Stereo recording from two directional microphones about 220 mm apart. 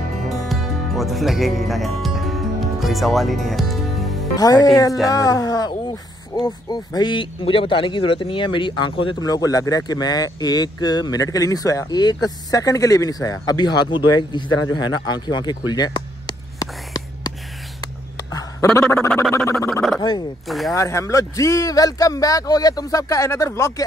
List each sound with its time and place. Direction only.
0.5 s music: centre (ahead or behind)
4.4 s speech: 15° left (ahead or behind)
14.7 s a sound: 20° left (ahead or behind)
20.0 s speech: 20° left (ahead or behind)
20.4 s speech: centre (ahead or behind)
20.7 s speech: 15° left (ahead or behind)